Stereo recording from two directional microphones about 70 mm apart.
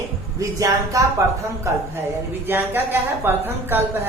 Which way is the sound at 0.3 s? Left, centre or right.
Right.